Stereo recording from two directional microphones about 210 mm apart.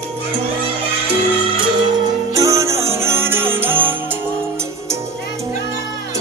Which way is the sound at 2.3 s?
15° right (ahead or behind).